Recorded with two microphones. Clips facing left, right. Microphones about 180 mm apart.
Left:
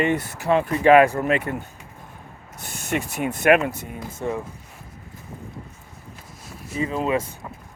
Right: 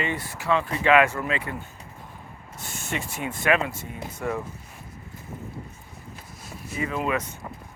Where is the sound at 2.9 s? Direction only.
50° left (ahead or behind).